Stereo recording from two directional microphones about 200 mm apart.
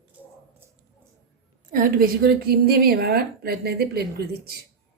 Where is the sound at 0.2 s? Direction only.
10° right (ahead or behind).